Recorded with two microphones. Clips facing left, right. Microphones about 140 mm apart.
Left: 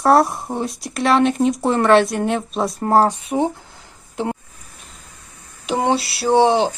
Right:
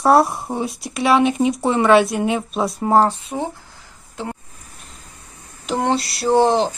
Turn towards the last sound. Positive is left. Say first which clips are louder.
# left 1 dB
turn(degrees=0)  # may be behind; listen again after turning